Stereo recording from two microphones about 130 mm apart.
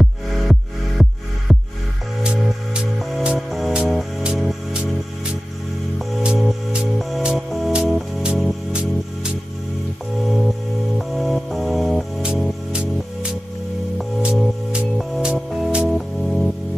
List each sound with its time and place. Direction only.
0.0 s music: centre (ahead or behind)
5.9 s music: 5° right (ahead or behind)